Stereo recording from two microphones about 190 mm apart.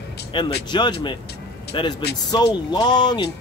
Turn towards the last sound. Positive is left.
turn(degrees=20)  # may be behind; listen again after turning